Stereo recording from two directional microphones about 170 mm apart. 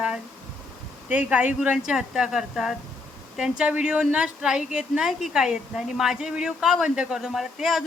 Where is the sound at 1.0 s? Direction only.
10° right (ahead or behind).